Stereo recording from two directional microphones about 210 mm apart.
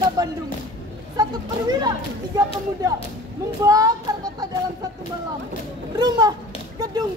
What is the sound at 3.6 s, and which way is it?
Speech, 15° right (ahead or behind).